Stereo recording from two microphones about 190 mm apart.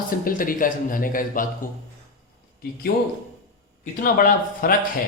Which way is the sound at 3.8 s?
45° left (ahead or behind).